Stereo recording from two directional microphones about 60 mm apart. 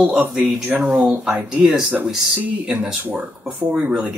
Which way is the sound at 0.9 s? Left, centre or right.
Right.